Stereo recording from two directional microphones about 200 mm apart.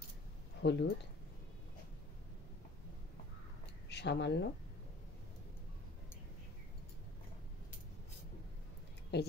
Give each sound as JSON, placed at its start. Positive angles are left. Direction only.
{"t": 0.6, "sound": "speech", "side_deg": 60}
{"t": 3.9, "sound": "speech", "side_deg": 60}
{"t": 9.1, "sound": "a woman's voice", "side_deg": 55}